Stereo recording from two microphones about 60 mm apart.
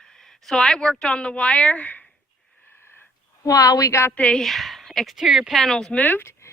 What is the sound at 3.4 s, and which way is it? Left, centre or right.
Speech, left.